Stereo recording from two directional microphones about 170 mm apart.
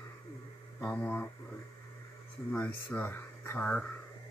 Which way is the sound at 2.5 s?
10° left (ahead or behind).